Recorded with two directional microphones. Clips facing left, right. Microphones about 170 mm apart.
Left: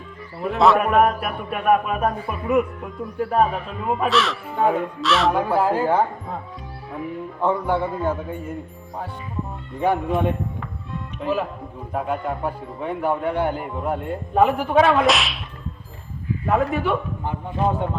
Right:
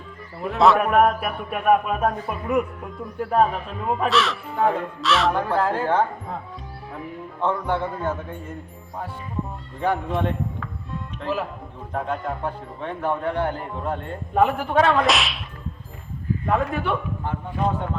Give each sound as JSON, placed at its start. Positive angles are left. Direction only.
{"t": 0.4, "sound": "a man's voice", "side_deg": 0}
{"t": 3.8, "sound": "a man's voice", "side_deg": 0}
{"t": 5.3, "sound": "a man's voice", "side_deg": 10}
{"t": 7.4, "sound": "a man's voice", "side_deg": 10}
{"t": 9.8, "sound": "a man's voice", "side_deg": 15}
{"t": 10.2, "sound": "a sound", "side_deg": 15}
{"t": 11.2, "sound": "a man's voice", "side_deg": 0}
{"t": 16.5, "sound": "a man's voice", "side_deg": 0}
{"t": 17.2, "sound": "a man's voice", "side_deg": 15}